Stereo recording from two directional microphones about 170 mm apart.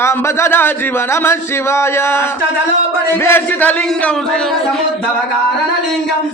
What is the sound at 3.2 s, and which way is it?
Speech, 10° left (ahead or behind).